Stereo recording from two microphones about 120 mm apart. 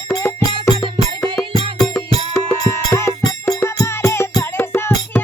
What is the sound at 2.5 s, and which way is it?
Music, 20° left (ahead or behind).